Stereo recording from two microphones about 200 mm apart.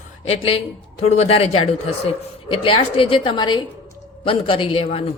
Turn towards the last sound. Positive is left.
turn(degrees=30)  # may be behind; listen again after turning